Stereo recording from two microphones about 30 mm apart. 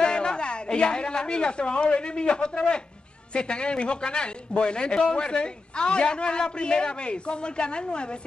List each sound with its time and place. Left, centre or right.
0.0 s a woman's voice: left